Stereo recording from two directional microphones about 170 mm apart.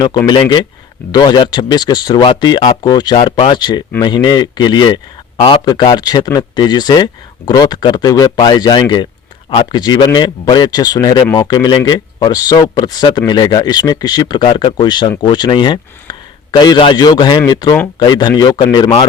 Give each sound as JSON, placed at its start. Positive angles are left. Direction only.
{"t": 0.3, "sound": "speech", "side_deg": 25}